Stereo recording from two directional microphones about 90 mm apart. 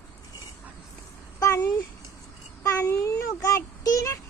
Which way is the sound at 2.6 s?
35° left (ahead or behind).